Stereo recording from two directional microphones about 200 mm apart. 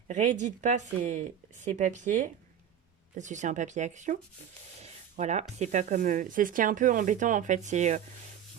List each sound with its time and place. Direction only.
0.1 s speech: 35° right (ahead or behind)